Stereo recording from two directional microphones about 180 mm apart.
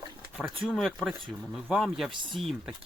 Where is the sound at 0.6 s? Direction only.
Centre (ahead or behind).